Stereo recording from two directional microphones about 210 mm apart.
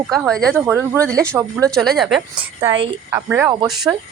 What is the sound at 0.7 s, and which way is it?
Speech, 10° right (ahead or behind).